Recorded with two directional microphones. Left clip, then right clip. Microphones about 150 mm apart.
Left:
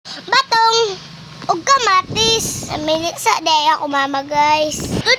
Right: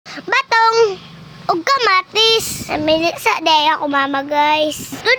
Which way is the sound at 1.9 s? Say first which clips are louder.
Right 1 dB; 25° right (ahead or behind).